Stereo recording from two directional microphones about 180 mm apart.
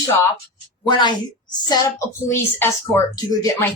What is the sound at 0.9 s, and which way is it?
A woman's voice, 25° left (ahead or behind).